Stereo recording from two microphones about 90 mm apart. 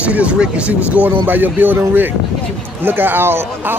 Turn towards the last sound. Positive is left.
turn(degrees=-25)  # may be behind; listen again after turning